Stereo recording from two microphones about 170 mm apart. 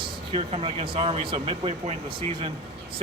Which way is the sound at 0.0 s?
35° right (ahead or behind).